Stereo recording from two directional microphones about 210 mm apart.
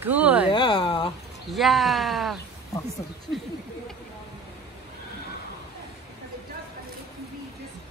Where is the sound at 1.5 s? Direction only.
Centre (ahead or behind).